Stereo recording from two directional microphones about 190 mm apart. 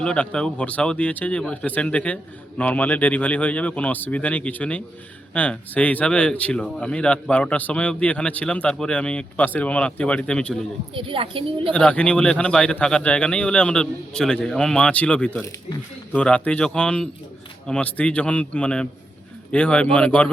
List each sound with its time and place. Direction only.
0.0 s speech: 5° left (ahead or behind)
10.9 s a woman's voice: 30° right (ahead or behind)
11.7 s a man's voice: 5° left (ahead or behind)